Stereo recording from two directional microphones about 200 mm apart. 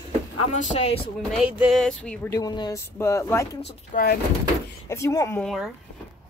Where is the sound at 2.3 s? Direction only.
20° left (ahead or behind).